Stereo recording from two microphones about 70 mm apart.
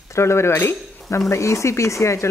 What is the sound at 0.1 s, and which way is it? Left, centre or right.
Speech, left.